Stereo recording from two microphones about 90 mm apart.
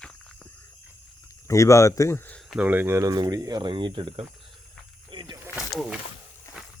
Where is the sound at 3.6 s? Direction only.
60° right (ahead or behind).